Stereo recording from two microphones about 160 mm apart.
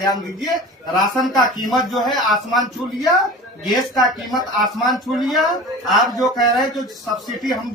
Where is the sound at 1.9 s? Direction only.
Centre (ahead or behind).